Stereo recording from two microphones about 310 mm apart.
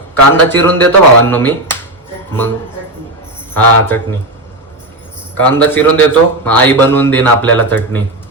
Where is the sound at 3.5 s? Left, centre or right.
Centre.